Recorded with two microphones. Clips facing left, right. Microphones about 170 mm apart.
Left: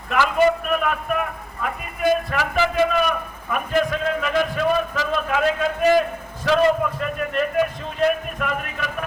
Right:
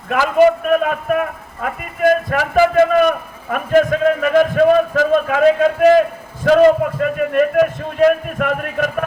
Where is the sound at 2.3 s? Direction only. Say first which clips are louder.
Right 8 dB; 50° right (ahead or behind).